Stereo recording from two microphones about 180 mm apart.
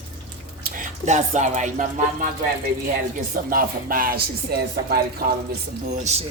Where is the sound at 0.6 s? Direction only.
45° right (ahead or behind).